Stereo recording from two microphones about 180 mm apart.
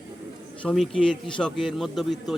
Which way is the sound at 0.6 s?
5° left (ahead or behind).